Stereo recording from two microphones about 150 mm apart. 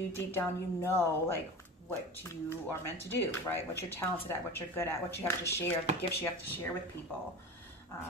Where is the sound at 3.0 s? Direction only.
15° left (ahead or behind).